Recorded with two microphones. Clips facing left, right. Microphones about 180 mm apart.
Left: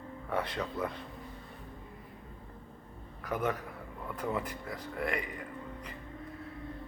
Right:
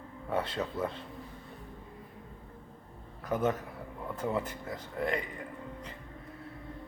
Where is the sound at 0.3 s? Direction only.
25° right (ahead or behind).